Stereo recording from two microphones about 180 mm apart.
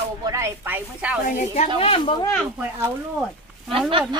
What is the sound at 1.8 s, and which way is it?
Speech, 30° left (ahead or behind).